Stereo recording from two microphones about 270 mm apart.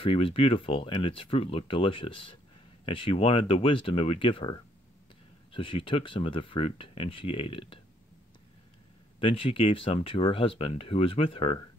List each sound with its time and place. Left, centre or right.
0.0 s speech: centre
9.2 s speech: centre